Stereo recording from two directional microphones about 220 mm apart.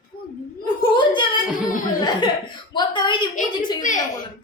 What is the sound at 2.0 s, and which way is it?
Chuckle, 20° left (ahead or behind).